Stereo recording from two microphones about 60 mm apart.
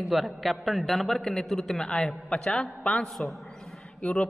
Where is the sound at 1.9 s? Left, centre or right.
Centre.